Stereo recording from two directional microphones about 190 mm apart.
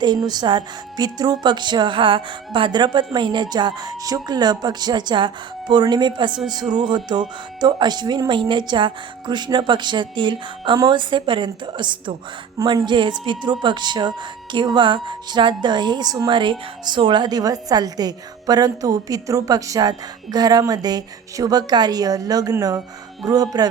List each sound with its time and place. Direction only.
0.0 s speech: 20° right (ahead or behind)